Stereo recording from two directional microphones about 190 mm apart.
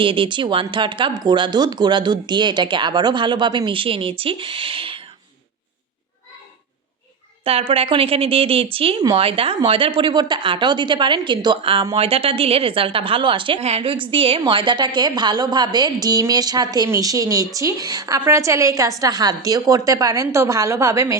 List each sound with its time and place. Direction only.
0.0 s speech: 25° right (ahead or behind)
7.4 s a woman's voice: 30° right (ahead or behind)